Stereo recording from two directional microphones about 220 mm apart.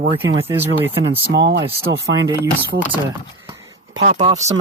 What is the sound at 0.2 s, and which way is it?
Speech, 10° right (ahead or behind).